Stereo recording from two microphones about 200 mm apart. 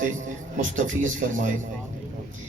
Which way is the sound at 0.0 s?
40° right (ahead or behind).